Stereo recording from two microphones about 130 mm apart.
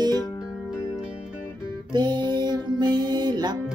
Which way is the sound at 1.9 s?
35° right (ahead or behind).